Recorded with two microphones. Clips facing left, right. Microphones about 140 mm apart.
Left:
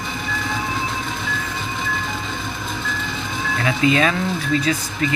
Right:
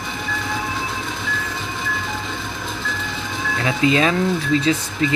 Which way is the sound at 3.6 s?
25° right (ahead or behind).